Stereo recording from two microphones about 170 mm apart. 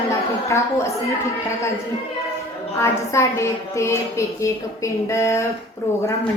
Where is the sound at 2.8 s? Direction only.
15° left (ahead or behind).